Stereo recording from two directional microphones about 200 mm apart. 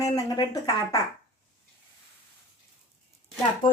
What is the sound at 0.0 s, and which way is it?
Speech, 20° left (ahead or behind).